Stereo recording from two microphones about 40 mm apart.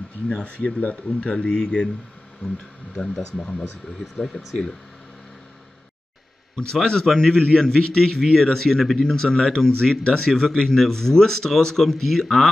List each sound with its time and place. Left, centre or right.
0.3 s speech: left
2.9 s speech: left
6.5 s speech: centre